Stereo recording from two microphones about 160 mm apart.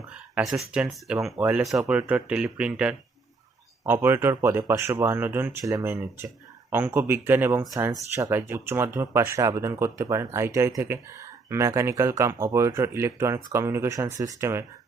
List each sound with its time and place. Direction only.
0.3 s speech: centre (ahead or behind); by 14.6 s 20° right (ahead or behind)